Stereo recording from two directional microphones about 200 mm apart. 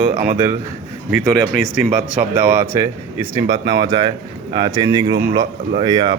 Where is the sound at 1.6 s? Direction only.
Centre (ahead or behind); by 6.1 s 20° right (ahead or behind).